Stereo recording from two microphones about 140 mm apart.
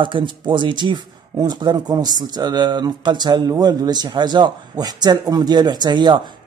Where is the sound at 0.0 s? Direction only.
35° right (ahead or behind).